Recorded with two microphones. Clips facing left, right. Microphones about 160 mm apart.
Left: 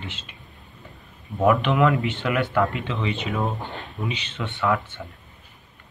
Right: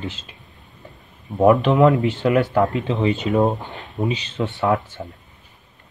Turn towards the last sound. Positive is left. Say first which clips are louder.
# right 4 dB
turn(degrees=-35)  # may be behind; listen again after turning